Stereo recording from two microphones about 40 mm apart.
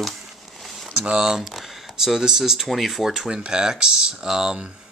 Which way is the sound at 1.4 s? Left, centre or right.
Centre.